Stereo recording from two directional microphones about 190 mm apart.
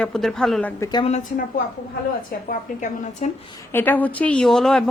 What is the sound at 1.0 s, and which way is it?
Speech, 35° left (ahead or behind).